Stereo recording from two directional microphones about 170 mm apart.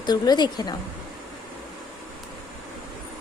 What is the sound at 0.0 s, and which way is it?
Speech, 25° left (ahead or behind).